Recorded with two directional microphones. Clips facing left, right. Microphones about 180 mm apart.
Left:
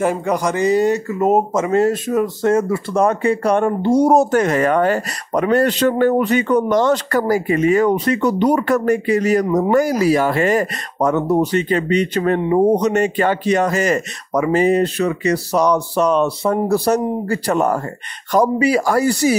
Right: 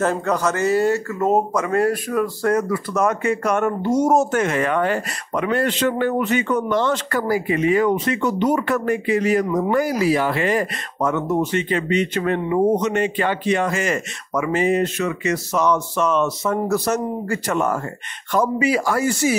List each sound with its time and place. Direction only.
0.0 s speech: 15° left (ahead or behind); by 19.3 s 35° left (ahead or behind)